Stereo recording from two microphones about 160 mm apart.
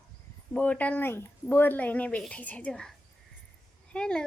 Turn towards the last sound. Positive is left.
turn(degrees=5)  # may be behind; listen again after turning